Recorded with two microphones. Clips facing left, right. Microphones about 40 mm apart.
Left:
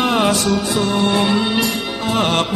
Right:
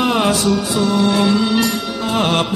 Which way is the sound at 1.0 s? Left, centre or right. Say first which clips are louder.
Right 2 dB; centre.